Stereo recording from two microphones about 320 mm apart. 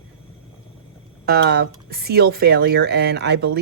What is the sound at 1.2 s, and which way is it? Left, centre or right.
Speech, right.